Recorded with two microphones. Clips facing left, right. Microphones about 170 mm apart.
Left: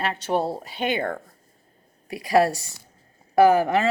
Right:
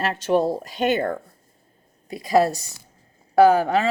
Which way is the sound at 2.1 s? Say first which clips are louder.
Right 1 dB; 20° right (ahead or behind).